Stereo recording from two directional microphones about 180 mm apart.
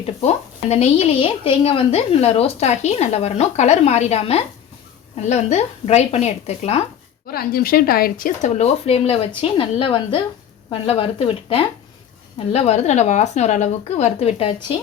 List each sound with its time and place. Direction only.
0.0 s a woman's voice: 35° left (ahead or behind)
7.3 s a woman's voice: 55° left (ahead or behind); by 14.8 s 30° left (ahead or behind)